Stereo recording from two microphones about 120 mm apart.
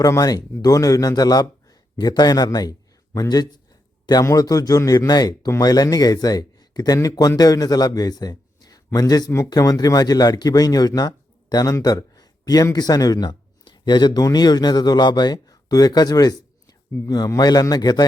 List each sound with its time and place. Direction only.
0.0 s a man's voice: 30° left (ahead or behind)